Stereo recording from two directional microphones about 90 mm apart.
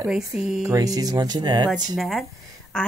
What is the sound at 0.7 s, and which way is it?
Speech, 45° right (ahead or behind).